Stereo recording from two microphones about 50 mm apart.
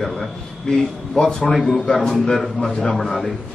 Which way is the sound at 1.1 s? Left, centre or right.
Centre.